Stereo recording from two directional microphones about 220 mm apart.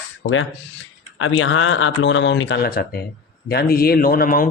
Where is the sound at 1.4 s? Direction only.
60° left (ahead or behind); by 4.4 s 40° left (ahead or behind).